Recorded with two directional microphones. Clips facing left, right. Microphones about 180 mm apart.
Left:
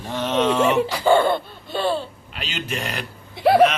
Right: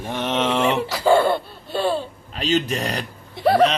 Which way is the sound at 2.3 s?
35° right (ahead or behind).